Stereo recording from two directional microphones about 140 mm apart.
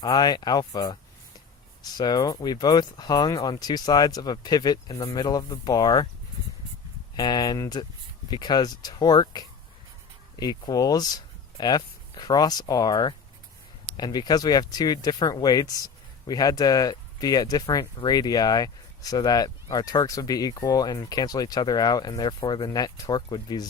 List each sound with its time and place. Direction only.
0.0 s speech: 30° left (ahead or behind)
7.2 s speech: 30° left (ahead or behind)